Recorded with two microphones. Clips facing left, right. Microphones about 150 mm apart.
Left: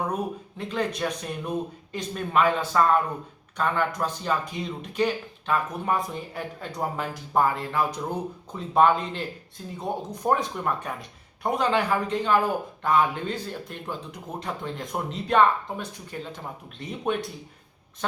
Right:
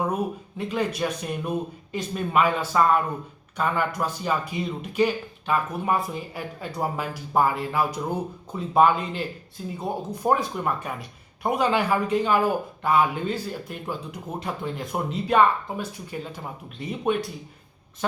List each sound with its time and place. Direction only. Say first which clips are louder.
0.1 s speech: right 2 dB; 10° right (ahead or behind)